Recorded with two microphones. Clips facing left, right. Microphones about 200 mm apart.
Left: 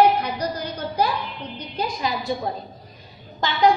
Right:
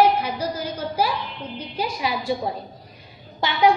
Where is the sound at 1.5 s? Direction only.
10° right (ahead or behind).